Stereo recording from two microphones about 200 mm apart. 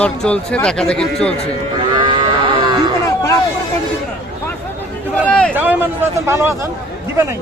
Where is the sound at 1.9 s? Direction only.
20° right (ahead or behind).